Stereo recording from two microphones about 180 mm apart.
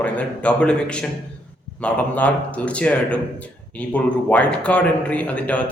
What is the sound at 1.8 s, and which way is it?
A man's voice, 5° left (ahead or behind).